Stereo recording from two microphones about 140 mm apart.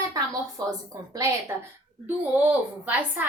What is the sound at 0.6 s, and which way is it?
Speech, 25° right (ahead or behind).